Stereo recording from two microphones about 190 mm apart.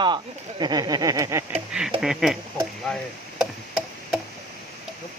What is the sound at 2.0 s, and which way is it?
Speech, 5° right (ahead or behind).